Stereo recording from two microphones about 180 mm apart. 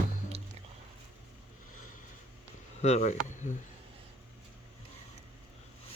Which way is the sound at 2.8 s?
40° left (ahead or behind).